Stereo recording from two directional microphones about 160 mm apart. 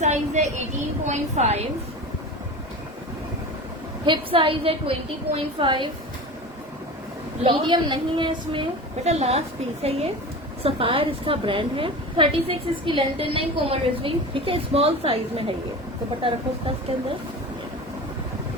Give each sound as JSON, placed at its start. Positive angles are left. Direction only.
{"t": 0.0, "sound": "a woman's voice", "side_deg": -45}
{"t": 4.0, "sound": "a woman's voice", "side_deg": -30}
{"t": 7.4, "sound": "a woman's voice", "side_deg": -30}
{"t": 9.0, "sound": "a woman's voice", "side_deg": -45}
{"t": 10.6, "sound": "a woman's voice", "side_deg": -35}